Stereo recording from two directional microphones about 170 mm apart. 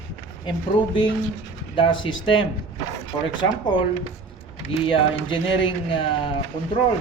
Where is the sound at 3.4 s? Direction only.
25° left (ahead or behind).